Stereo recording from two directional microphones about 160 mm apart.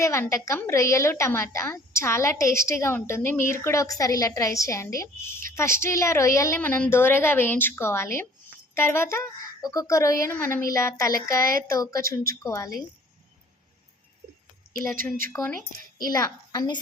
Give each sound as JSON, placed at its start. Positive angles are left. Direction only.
{"t": 0.0, "sound": "a woman's voice", "side_deg": 15}
{"t": 14.7, "sound": "a woman's voice", "side_deg": -60}
{"t": 15.3, "sound": "a woman's voice", "side_deg": 15}